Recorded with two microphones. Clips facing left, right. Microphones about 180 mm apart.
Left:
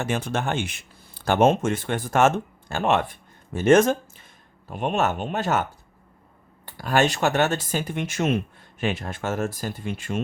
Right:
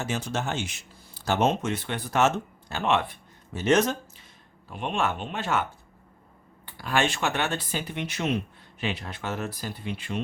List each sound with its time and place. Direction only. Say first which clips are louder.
0.0 s speech: left 4 dB; 55° left (ahead or behind)
6.7 s speech: left 5 dB; 40° left (ahead or behind)